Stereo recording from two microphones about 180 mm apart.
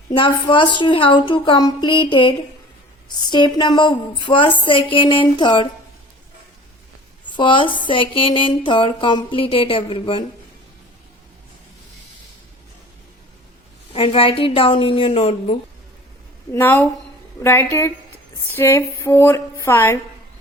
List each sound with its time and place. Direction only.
0.1 s speech: 25° left (ahead or behind)
7.3 s speech: 25° left (ahead or behind)
13.9 s a woman's voice: 30° left (ahead or behind)
16.5 s a woman's voice: 10° left (ahead or behind)